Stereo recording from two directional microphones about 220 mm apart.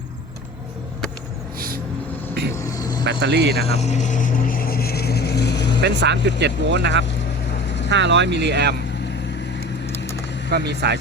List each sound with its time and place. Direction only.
1.5 s vehicle: 40° right (ahead or behind)
2.6 s vehicle: 15° left (ahead or behind)
3.0 s speech: 50° right (ahead or behind)
3.7 s speech: 30° left (ahead or behind); by 5.8 s 50° left (ahead or behind)
5.8 s speech: 50° right (ahead or behind)
10.5 s speech: 50° right (ahead or behind)